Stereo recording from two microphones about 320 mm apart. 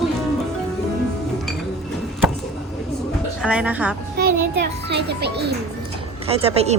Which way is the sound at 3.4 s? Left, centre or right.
Centre.